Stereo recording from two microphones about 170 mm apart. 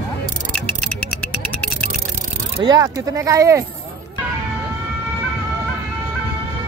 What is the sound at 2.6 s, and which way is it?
Speech, 20° right (ahead or behind).